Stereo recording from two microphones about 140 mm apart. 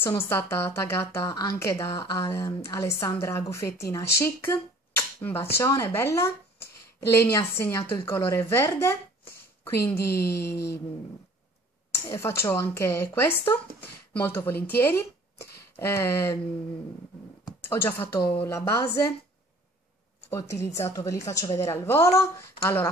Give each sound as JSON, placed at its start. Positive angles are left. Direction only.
{"t": 0.0, "sound": "a woman's voice", "side_deg": 15}
{"t": 12.1, "sound": "speech", "side_deg": 20}
{"t": 17.6, "sound": "speech", "side_deg": 15}
{"t": 20.2, "sound": "a woman's voice", "side_deg": 20}